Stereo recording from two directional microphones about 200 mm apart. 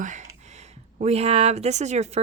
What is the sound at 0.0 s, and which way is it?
Speech, 35° right (ahead or behind).